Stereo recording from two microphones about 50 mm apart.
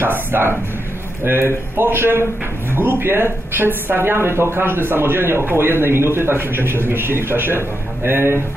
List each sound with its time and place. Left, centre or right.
0.0 s a woman's voice: right